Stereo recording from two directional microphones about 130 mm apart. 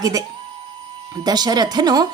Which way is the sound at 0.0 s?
25° right (ahead or behind).